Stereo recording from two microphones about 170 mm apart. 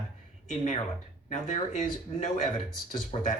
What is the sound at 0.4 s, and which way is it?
Speech, 40° left (ahead or behind).